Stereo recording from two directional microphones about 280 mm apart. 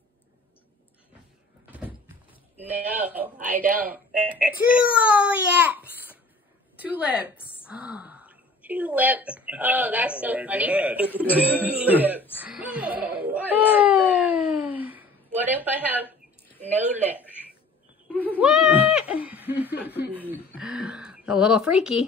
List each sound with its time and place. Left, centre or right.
1.7 s door: centre
2.5 s a sound: centre
2.9 s speech: centre
12.4 s whimper: centre
16.7 s speech: centre
18.0 s goat: centre
19.2 s snicker: centre
20.2 s a sound: centre